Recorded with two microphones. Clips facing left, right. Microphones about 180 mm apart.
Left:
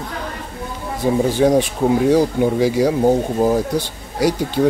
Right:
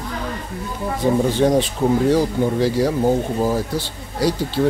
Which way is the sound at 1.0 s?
10° left (ahead or behind).